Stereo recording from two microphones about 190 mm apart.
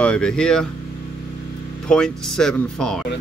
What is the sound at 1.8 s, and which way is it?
Speech, 5° left (ahead or behind).